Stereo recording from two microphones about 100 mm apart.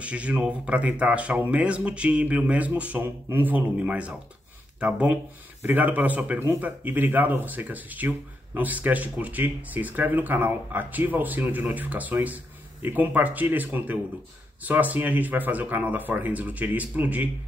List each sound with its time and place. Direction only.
0.0 s speech: 10° right (ahead or behind)